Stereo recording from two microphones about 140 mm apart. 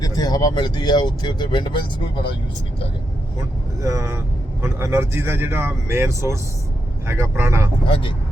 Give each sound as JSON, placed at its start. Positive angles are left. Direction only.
{"t": 0.0, "sound": "speech", "side_deg": 25}
{"t": 3.8, "sound": "speech", "side_deg": -25}
{"t": 7.9, "sound": "speech", "side_deg": 40}